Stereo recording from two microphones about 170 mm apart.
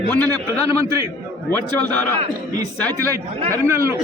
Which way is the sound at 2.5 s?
20° right (ahead or behind).